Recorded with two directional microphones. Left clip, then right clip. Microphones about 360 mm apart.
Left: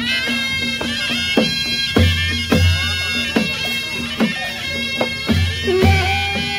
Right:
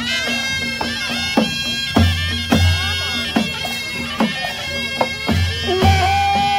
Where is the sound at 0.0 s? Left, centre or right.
Right.